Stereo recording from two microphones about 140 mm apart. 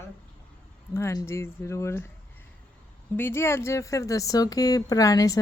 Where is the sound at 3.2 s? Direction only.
15° left (ahead or behind).